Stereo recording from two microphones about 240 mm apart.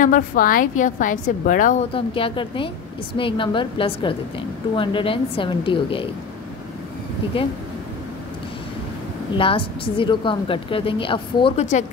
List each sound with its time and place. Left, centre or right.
0.0 s a woman's voice: left
7.3 s a woman's voice: left
9.4 s a woman's voice: left